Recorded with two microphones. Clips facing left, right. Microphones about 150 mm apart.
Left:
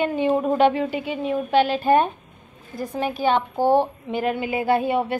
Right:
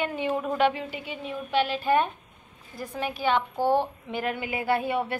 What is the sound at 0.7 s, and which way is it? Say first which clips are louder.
Speech: left 10 dB; 60° left (ahead or behind).